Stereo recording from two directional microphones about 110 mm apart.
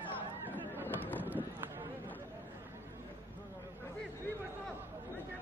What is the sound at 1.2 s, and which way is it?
Run, 15° right (ahead or behind).